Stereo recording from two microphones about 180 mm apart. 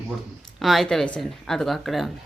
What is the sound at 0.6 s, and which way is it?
A woman's voice, centre (ahead or behind).